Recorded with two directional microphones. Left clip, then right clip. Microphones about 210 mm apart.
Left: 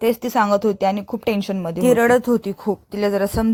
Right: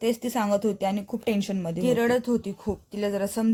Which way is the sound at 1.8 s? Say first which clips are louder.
Left 9 dB; 25° left (ahead or behind).